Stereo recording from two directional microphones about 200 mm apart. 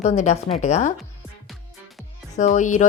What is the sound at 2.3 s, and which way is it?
Speech, 35° left (ahead or behind).